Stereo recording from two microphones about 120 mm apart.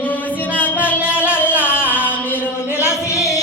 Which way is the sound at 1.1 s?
10° right (ahead or behind).